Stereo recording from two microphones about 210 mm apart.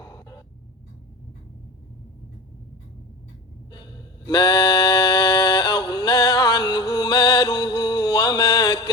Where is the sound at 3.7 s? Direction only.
20° left (ahead or behind).